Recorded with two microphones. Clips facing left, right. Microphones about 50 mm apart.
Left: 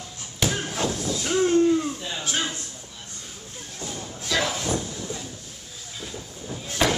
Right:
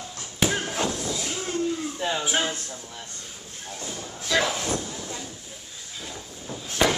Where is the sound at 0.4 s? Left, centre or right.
Centre.